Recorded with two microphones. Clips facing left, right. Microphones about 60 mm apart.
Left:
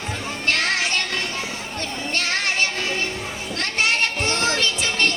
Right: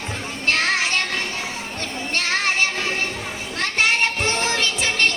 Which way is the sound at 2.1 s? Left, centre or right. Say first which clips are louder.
Right 2 dB; right.